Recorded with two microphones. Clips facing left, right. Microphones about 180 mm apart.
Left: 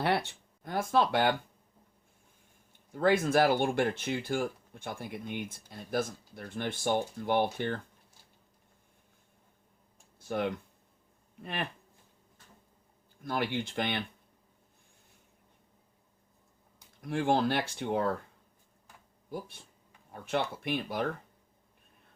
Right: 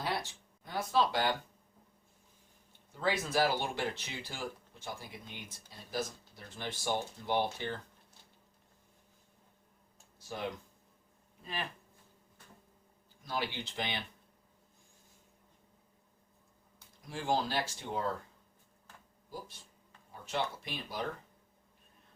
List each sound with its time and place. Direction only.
0.0 s speech: 65° left (ahead or behind)
2.9 s speech: 50° left (ahead or behind)
10.2 s speech: 60° left (ahead or behind)
13.2 s speech: 55° left (ahead or behind)
17.0 s speech: 60° left (ahead or behind)
19.3 s speech: 60° left (ahead or behind)